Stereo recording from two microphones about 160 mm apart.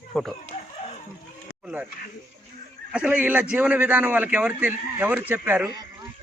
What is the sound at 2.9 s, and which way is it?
A man's voice, 10° right (ahead or behind).